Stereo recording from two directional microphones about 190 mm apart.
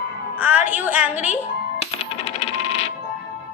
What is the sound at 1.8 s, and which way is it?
Coin, 30° left (ahead or behind).